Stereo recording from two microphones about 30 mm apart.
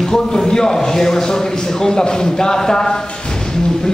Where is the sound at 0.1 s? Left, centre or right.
Centre.